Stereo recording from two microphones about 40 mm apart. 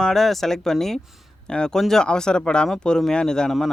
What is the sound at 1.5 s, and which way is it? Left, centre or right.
Speech, left.